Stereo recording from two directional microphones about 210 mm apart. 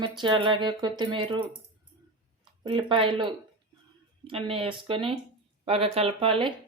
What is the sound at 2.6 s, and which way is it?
Speech, 25° right (ahead or behind).